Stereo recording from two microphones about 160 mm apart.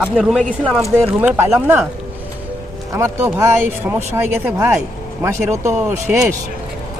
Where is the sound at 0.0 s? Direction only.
Centre (ahead or behind).